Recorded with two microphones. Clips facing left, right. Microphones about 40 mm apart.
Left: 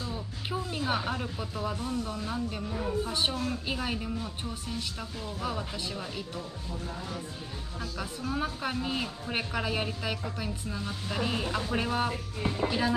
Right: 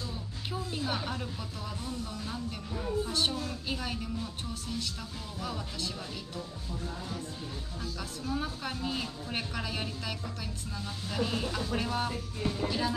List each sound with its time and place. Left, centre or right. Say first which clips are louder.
0.0 s speech: left 3 dB; centre
8.0 s speech: left 3 dB; left